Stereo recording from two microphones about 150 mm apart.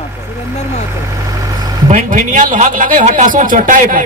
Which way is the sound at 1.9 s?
60° right (ahead or behind).